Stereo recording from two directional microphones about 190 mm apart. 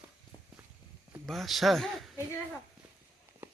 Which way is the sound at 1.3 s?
Centre (ahead or behind).